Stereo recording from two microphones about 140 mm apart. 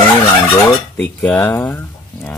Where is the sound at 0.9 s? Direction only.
15° left (ahead or behind).